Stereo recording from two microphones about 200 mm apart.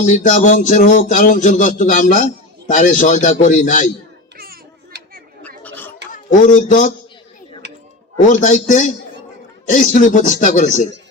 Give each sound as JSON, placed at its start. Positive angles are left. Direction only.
{"t": 0.0, "sound": "speech", "side_deg": 40}
{"t": 4.4, "sound": "children playing", "side_deg": -50}
{"t": 5.4, "sound": "a sound", "side_deg": 10}
{"t": 6.3, "sound": "speech", "side_deg": 40}
{"t": 8.3, "sound": "speech", "side_deg": 40}